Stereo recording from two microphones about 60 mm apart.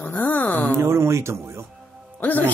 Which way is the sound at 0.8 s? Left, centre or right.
Right.